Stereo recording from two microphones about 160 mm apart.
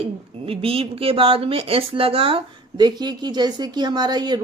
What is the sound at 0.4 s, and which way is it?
Speech, 35° right (ahead or behind).